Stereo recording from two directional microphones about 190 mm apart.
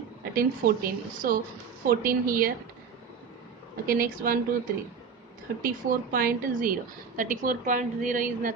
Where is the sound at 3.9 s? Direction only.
50° right (ahead or behind).